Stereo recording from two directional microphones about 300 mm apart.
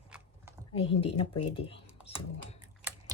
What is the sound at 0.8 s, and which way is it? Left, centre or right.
Speech, centre.